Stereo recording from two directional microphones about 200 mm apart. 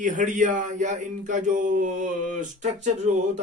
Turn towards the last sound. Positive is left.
turn(degrees=-35)  # may be behind; listen again after turning